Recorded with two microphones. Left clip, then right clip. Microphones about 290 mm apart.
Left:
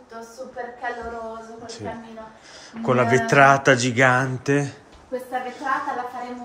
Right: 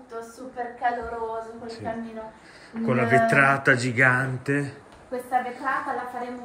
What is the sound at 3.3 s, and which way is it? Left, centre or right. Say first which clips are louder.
Speech: left 5 dB; centre.